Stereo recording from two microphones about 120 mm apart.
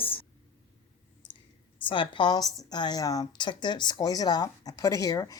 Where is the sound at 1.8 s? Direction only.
45° left (ahead or behind).